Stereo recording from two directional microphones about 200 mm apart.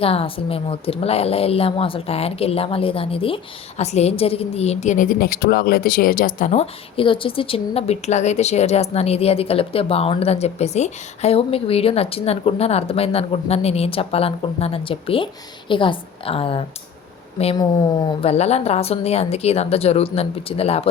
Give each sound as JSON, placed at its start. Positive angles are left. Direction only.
{"t": 0.0, "sound": "a woman's voice", "side_deg": 30}